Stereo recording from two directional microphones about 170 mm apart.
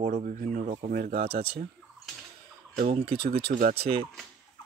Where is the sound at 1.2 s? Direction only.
35° right (ahead or behind).